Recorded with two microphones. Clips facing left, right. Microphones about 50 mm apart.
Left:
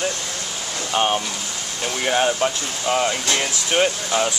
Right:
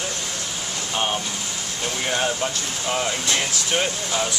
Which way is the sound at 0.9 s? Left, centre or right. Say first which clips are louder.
Left 5 dB; centre.